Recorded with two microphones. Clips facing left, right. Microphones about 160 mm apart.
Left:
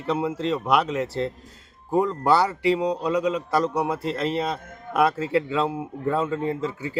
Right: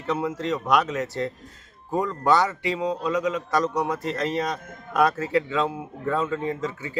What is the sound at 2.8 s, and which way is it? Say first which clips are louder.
Speech: left 2 dB; 15° left (ahead or behind).